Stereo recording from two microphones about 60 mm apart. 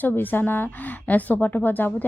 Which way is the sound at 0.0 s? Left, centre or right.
Left.